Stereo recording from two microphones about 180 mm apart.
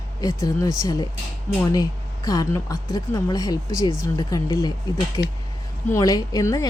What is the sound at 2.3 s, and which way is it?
A woman's voice, 20° left (ahead or behind).